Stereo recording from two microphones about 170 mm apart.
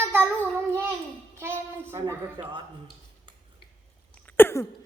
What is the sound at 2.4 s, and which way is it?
Speech, 30° right (ahead or behind).